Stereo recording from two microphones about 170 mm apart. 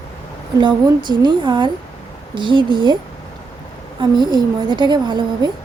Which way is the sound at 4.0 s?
25° right (ahead or behind).